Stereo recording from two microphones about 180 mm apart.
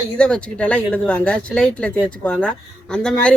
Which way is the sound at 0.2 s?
5° left (ahead or behind).